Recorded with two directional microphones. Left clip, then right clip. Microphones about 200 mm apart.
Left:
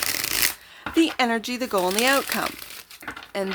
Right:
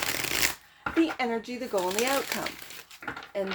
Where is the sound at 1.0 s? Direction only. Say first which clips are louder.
Left 6 dB; 40° left (ahead or behind).